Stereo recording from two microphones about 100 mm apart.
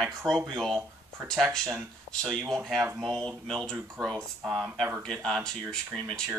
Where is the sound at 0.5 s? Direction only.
5° left (ahead or behind).